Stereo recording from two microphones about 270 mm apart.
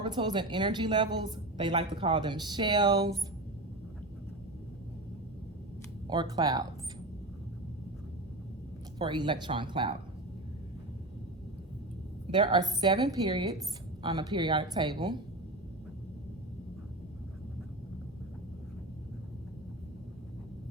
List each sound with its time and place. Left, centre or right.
0.0 s a woman's voice: centre
6.1 s a woman's voice: centre
9.0 s a woman's voice: centre
12.3 s a woman's voice: centre